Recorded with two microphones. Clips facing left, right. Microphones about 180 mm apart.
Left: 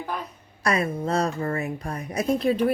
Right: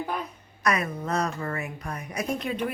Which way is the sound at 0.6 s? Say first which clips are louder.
Left 3 dB; 30° left (ahead or behind).